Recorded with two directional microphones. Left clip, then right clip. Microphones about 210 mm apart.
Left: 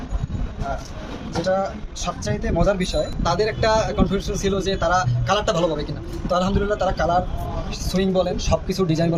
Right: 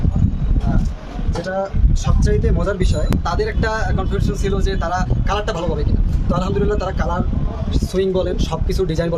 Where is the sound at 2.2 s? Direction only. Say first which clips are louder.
Right 1 dB; 25° right (ahead or behind).